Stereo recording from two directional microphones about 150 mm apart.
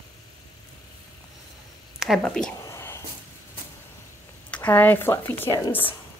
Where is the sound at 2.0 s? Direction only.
Centre (ahead or behind).